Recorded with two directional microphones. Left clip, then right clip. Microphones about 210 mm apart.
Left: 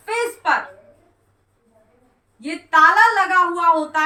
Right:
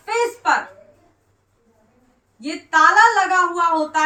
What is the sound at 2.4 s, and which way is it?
Speech, 15° right (ahead or behind).